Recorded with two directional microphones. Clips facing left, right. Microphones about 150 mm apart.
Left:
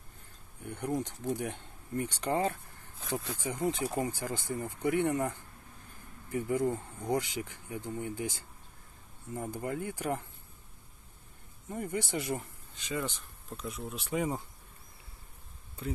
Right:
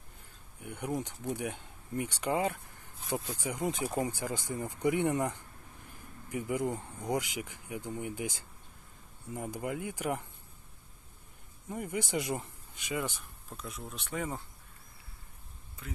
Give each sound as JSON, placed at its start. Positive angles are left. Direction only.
{"t": 0.6, "sound": "speech", "side_deg": -10}
{"t": 11.7, "sound": "speech", "side_deg": -10}
{"t": 13.6, "sound": "speech", "side_deg": 0}
{"t": 15.8, "sound": "speech", "side_deg": 30}